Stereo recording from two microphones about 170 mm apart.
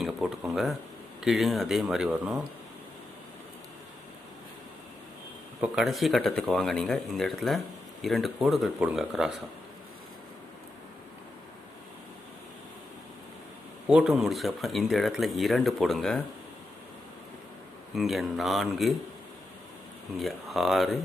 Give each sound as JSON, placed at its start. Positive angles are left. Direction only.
{"t": 0.0, "sound": "speech", "side_deg": -5}
{"t": 5.5, "sound": "speech", "side_deg": -5}
{"t": 13.8, "sound": "speech", "side_deg": -5}
{"t": 17.9, "sound": "speech", "side_deg": 0}
{"t": 20.1, "sound": "speech", "side_deg": 0}